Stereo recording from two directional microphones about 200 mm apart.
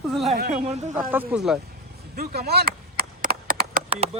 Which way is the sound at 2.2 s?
55° right (ahead or behind).